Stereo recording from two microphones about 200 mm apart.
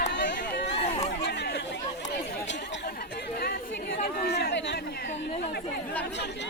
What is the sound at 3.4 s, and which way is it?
Chatter, 50° left (ahead or behind).